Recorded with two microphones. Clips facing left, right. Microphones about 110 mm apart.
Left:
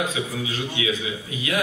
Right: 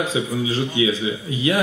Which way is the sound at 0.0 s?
30° right (ahead or behind).